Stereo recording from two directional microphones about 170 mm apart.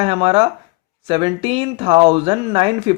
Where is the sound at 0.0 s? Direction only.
35° right (ahead or behind).